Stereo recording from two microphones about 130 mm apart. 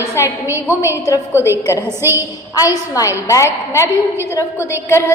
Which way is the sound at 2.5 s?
30° left (ahead or behind).